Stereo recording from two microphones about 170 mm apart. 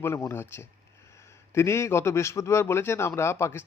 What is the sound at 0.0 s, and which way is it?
A man's voice, 15° left (ahead or behind).